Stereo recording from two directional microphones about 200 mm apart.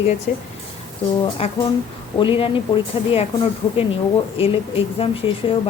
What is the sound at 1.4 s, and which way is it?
Speech, 30° left (ahead or behind).